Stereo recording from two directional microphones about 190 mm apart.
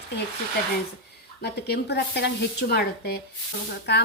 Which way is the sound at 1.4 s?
60° left (ahead or behind).